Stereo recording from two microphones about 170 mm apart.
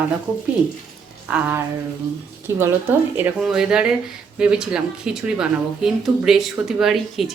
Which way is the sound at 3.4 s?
5° right (ahead or behind).